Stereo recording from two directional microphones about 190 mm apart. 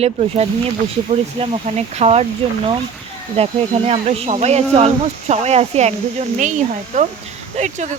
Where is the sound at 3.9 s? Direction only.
35° right (ahead or behind).